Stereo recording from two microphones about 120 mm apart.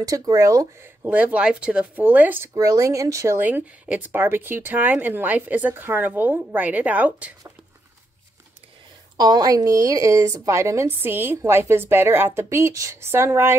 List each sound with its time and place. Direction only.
0.0 s a woman's voice: 30° right (ahead or behind)
1.0 s speech: 10° right (ahead or behind)
3.3 s speech: 15° right (ahead or behind)
9.1 s a woman's voice: 35° right (ahead or behind)